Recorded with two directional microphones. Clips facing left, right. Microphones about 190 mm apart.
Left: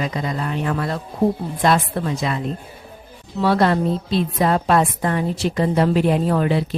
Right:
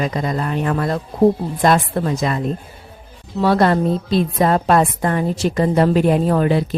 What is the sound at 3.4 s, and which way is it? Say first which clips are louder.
A woman's voice: right 2 dB; 45° right (ahead or behind).